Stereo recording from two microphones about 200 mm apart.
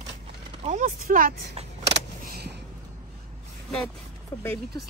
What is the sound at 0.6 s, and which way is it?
Vehicle, 40° right (ahead or behind).